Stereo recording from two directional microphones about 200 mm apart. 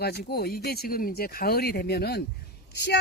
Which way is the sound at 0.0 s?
55° left (ahead or behind).